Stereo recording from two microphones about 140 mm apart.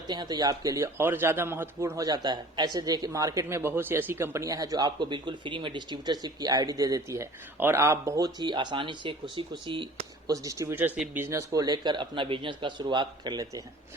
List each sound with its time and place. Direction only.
0.1 s speech: 30° right (ahead or behind)
10.3 s speech: 25° right (ahead or behind)